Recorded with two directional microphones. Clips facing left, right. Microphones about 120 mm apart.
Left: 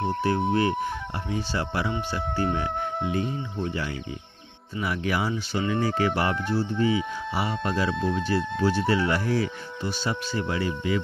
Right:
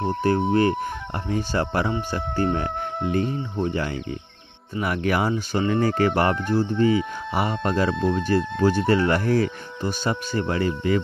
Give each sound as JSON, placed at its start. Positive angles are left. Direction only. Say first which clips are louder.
{"t": 0.0, "sound": "speech", "louder": "right 3 dB", "side_deg": -45}